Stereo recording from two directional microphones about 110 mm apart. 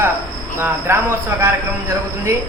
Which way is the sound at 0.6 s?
20° right (ahead or behind).